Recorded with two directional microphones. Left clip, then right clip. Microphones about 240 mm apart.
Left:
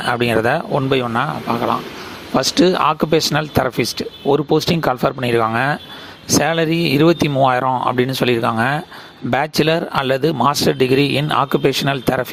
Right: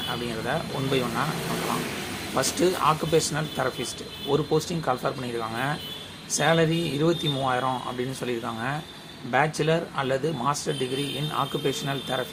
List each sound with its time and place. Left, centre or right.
0.1 s speech: left
2.3 s speech: left